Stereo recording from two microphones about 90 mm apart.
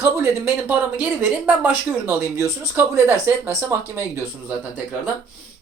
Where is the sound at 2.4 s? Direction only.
30° right (ahead or behind).